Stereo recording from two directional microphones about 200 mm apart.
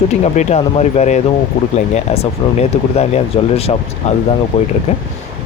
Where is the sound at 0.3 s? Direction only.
30° left (ahead or behind).